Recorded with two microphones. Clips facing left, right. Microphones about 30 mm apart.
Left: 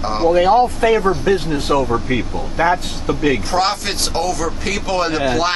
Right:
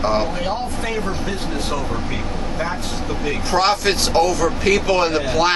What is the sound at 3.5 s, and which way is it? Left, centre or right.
Speech, centre.